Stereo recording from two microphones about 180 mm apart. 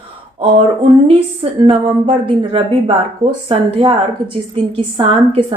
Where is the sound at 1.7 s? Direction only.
30° right (ahead or behind).